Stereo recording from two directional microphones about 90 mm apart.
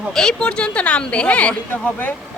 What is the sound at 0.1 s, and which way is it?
Speech, 5° left (ahead or behind).